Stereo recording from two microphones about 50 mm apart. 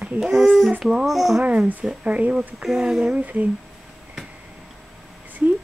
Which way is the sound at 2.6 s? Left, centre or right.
Centre.